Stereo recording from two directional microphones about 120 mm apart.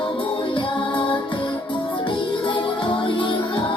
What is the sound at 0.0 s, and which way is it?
Music, 45° left (ahead or behind).